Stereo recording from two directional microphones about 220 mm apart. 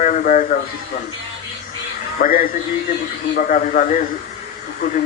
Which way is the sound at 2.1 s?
40° left (ahead or behind).